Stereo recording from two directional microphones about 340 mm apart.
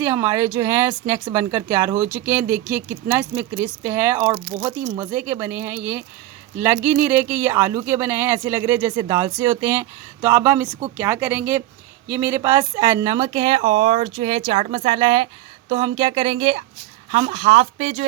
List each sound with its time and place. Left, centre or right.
0.0 s speech: centre